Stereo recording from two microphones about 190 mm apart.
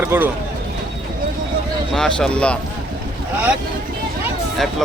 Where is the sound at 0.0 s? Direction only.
10° right (ahead or behind).